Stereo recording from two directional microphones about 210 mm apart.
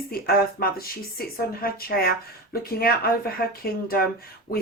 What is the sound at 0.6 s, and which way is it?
Speech, 45° left (ahead or behind).